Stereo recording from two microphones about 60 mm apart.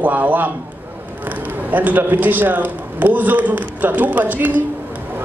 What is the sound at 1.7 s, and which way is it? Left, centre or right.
A man's voice, right.